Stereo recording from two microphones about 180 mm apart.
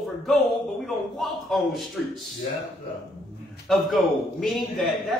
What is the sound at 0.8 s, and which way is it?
Speech, centre (ahead or behind).